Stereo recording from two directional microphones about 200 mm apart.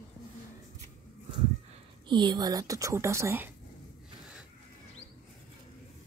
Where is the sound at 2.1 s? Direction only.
20° right (ahead or behind).